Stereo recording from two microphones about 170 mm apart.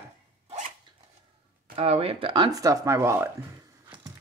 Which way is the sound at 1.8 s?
35° right (ahead or behind).